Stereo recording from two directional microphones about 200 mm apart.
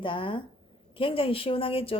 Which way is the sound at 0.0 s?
25° left (ahead or behind).